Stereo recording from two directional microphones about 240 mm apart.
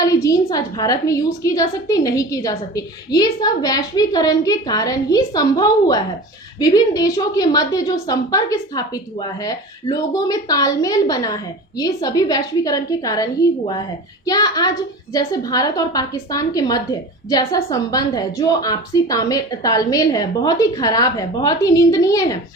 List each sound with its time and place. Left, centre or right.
0.0 s a woman's voice: centre
14.3 s a woman's voice: centre